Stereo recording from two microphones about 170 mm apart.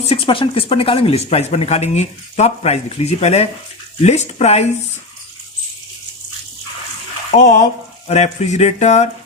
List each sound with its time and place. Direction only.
0.0 s speech: 35° left (ahead or behind)
7.3 s speech: 45° left (ahead or behind)